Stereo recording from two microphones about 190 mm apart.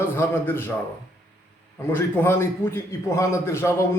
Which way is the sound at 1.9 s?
10° left (ahead or behind).